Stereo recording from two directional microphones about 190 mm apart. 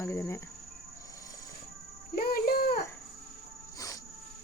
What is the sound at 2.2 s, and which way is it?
Music, 55° left (ahead or behind).